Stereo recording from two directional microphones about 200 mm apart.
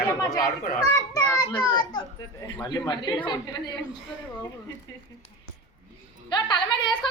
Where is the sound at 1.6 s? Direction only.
20° left (ahead or behind).